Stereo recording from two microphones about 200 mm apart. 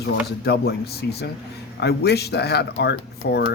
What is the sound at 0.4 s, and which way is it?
A woman's voice, 55° left (ahead or behind).